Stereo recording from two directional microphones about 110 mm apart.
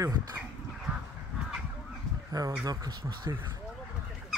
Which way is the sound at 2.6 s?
40° right (ahead or behind).